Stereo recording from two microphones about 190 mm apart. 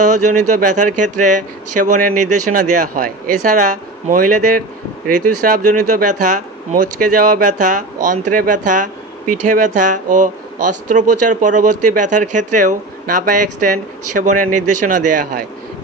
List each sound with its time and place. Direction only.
0.0 s speech: 40° right (ahead or behind)